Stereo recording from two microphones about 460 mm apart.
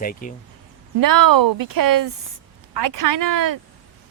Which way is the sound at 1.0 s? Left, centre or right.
Right.